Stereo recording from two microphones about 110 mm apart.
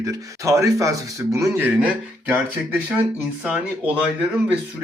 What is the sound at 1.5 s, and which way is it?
Speech, 15° right (ahead or behind).